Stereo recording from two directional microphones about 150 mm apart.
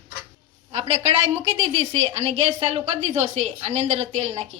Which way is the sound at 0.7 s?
45° right (ahead or behind).